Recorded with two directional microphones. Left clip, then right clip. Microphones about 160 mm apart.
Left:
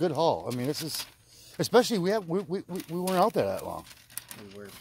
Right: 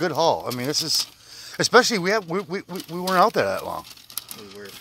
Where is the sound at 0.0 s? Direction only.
15° left (ahead or behind).